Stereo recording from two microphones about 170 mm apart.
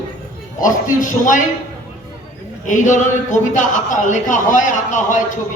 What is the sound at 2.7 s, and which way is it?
A man's voice, 50° left (ahead or behind).